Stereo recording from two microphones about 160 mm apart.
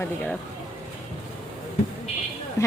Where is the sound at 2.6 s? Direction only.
20° left (ahead or behind).